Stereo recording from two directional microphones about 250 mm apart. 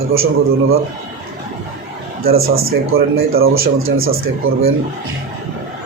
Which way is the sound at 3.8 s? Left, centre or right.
Right.